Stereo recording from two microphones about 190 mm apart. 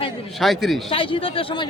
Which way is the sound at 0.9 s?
30° left (ahead or behind).